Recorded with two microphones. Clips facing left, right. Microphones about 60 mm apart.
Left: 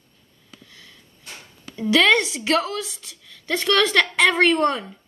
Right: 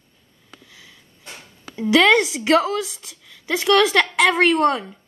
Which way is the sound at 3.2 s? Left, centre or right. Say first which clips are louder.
Right 1 dB; centre.